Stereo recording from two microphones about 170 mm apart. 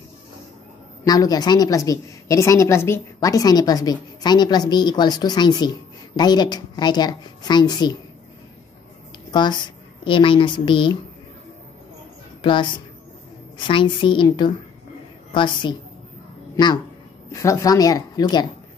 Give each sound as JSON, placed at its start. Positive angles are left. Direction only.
{"t": 1.0, "sound": "a woman's voice", "side_deg": 20}
{"t": 9.3, "sound": "a woman's voice", "side_deg": 25}
{"t": 12.4, "sound": "a woman's voice", "side_deg": 30}
{"t": 13.7, "sound": "a woman's voice", "side_deg": 30}